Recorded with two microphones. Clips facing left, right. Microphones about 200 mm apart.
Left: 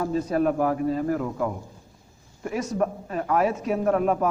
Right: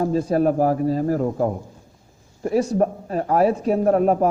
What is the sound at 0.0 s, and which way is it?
Speech, 35° right (ahead or behind).